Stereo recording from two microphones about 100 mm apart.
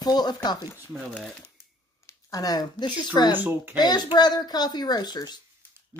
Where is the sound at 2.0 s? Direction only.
35° left (ahead or behind).